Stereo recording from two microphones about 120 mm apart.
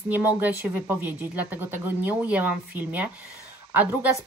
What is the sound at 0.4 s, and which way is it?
Speech, 15° right (ahead or behind).